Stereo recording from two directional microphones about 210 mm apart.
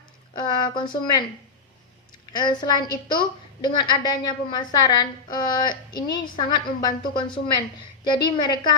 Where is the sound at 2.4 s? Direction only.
20° left (ahead or behind).